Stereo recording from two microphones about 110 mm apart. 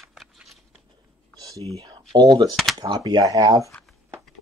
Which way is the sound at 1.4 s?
30° right (ahead or behind).